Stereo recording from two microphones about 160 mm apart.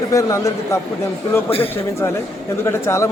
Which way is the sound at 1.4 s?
35° left (ahead or behind).